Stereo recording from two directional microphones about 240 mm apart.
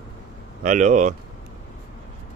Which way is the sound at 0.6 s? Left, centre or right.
Right.